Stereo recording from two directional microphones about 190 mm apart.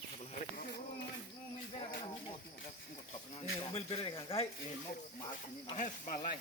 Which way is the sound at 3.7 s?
30° left (ahead or behind).